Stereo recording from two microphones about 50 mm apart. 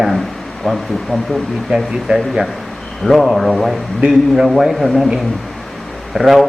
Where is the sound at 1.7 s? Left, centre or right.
Centre.